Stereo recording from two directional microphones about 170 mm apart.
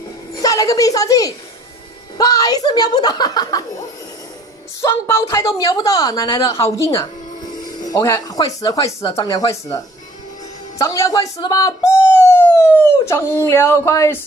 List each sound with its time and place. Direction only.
0.4 s a woman's voice: 20° left (ahead or behind)
4.8 s speech: 15° left (ahead or behind)
7.9 s speech: 20° left (ahead or behind)
10.8 s speech: 20° left (ahead or behind)